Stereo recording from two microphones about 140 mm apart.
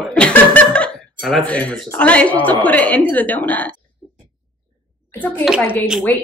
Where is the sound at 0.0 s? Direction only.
5° left (ahead or behind).